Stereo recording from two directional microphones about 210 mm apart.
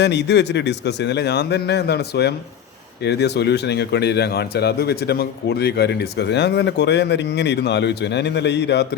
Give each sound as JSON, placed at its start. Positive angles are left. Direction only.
{"t": 0.0, "sound": "a man's voice", "side_deg": 55}